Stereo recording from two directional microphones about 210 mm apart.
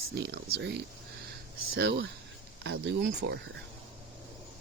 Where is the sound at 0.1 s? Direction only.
50° right (ahead or behind).